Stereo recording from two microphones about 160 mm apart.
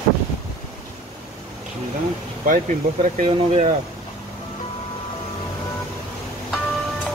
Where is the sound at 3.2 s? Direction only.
50° right (ahead or behind).